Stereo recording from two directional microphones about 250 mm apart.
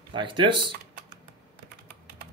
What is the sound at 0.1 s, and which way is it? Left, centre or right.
Speech, centre.